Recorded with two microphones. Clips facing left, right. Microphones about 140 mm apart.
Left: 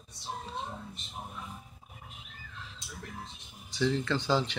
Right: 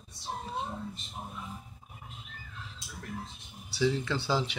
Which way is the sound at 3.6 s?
10° right (ahead or behind).